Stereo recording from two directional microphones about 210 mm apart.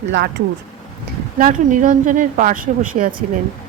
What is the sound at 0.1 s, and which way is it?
Speech, 55° right (ahead or behind).